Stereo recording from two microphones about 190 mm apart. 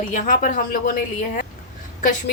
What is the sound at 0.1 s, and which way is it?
A woman's voice, 40° left (ahead or behind).